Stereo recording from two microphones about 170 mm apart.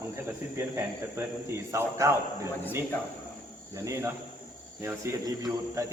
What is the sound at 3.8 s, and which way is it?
A man's voice, 15° right (ahead or behind).